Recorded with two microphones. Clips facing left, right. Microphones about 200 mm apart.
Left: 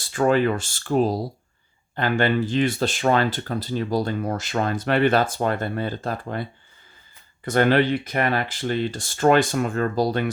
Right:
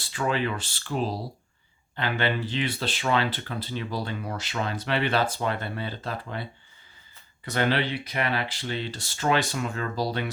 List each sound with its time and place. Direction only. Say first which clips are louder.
0.0 s speech: left 8 dB; 45° left (ahead or behind)